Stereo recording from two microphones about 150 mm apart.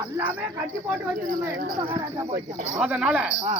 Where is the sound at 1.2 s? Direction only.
75° right (ahead or behind).